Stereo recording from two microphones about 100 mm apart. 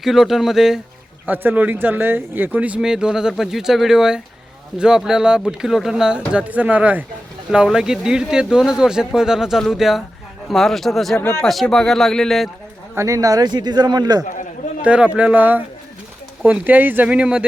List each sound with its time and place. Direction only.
0.0 s speech: centre (ahead or behind)
1.3 s speech: 20° right (ahead or behind); by 11.2 s centre (ahead or behind)
11.2 s speech: 20° left (ahead or behind)
11.4 s speech: centre (ahead or behind)
13.0 s a man's voice: 35° right (ahead or behind)
14.8 s speech: 10° right (ahead or behind)